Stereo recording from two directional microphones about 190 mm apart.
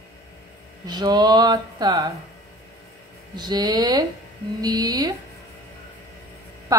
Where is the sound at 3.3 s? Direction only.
20° right (ahead or behind).